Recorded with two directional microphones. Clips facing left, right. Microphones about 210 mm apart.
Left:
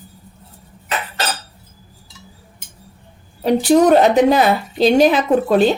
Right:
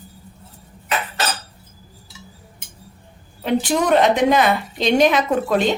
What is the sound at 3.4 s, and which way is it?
A woman's voice, 40° left (ahead or behind).